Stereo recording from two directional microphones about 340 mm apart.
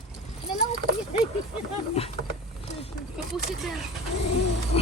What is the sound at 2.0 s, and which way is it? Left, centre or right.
Speech, centre.